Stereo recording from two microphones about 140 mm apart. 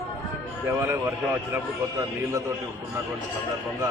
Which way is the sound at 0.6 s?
15° right (ahead or behind).